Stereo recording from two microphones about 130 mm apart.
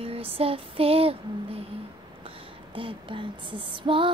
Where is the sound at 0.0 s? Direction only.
50° right (ahead or behind).